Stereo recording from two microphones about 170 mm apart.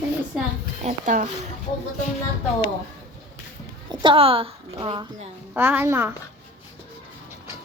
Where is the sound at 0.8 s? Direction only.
45° right (ahead or behind).